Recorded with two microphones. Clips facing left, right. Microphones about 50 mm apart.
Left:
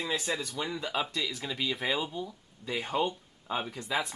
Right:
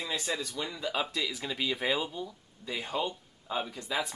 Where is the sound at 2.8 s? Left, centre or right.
Left.